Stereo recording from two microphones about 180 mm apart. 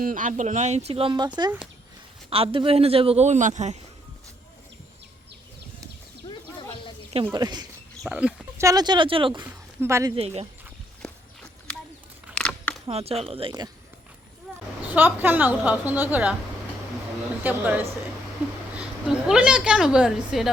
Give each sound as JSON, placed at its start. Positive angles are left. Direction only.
{"t": 0.0, "sound": "a man's voice", "side_deg": -45}
{"t": 2.3, "sound": "a man's voice", "side_deg": -30}
{"t": 7.3, "sound": "speech", "side_deg": -20}
{"t": 8.0, "sound": "speech", "side_deg": -5}
{"t": 9.4, "sound": "speech", "side_deg": -15}
{"t": 10.2, "sound": "a man's voice", "side_deg": -35}
{"t": 11.0, "sound": "walk", "side_deg": 5}
{"t": 12.3, "sound": "a sound", "side_deg": 5}
{"t": 12.9, "sound": "a man's voice", "side_deg": -35}
{"t": 14.8, "sound": "a woman's voice", "side_deg": -10}
{"t": 17.4, "sound": "a woman's voice", "side_deg": -10}
{"t": 19.0, "sound": "a woman's voice", "side_deg": -5}